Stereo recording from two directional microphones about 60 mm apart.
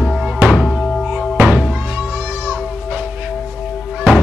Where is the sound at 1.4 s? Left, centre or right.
Centre.